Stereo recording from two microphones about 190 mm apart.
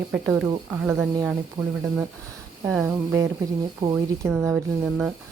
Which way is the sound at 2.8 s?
15° right (ahead or behind).